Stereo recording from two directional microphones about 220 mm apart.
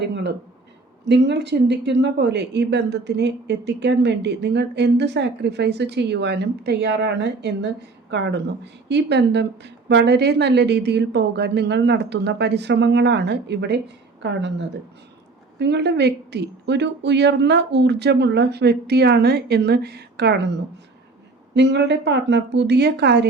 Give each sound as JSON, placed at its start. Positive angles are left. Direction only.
{"t": 0.0, "sound": "a woman's voice", "side_deg": -50}